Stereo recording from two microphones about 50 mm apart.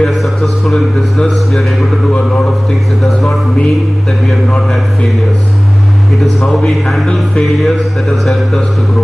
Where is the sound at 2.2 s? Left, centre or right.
Centre.